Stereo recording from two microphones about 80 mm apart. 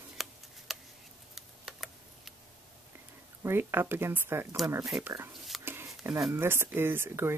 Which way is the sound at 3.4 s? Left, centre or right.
Right.